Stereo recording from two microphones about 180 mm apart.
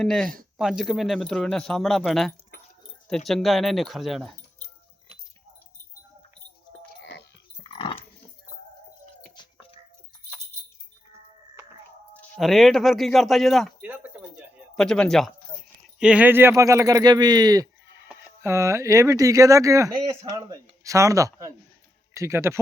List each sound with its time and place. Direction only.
0.0 s speech: 5° left (ahead or behind)
7.7 s dog: 30° left (ahead or behind)
9.3 s music: 25° left (ahead or behind)
12.4 s speech: centre (ahead or behind)
13.8 s a sound: 10° right (ahead or behind)
14.8 s speech: 5° left (ahead or behind); by 22.5 s 15° right (ahead or behind)